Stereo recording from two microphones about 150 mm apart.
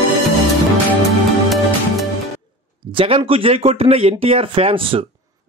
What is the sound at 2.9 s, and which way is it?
A man's voice, 35° right (ahead or behind).